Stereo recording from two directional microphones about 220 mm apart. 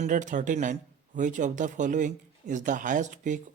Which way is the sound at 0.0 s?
35° right (ahead or behind).